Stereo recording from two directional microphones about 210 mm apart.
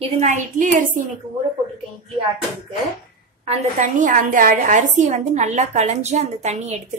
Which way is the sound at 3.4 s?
35° right (ahead or behind).